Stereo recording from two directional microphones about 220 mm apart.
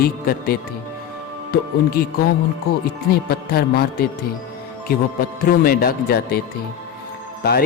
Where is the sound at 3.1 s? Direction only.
45° left (ahead or behind).